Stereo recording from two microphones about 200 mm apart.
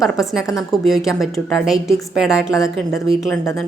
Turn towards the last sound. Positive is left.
turn(degrees=0)  # may be behind; listen again after turning